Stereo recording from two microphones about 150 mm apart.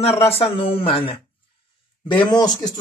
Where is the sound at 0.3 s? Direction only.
40° left (ahead or behind).